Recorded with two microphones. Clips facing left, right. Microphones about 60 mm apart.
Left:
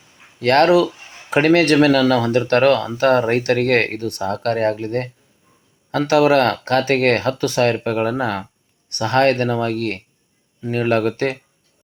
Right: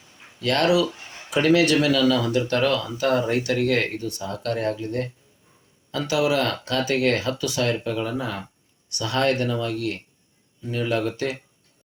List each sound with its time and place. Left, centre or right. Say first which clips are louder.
0.3 s speech: left 7 dB; left
0.9 s a sound: left 2 dB; centre
1.3 s speech: left 4 dB; left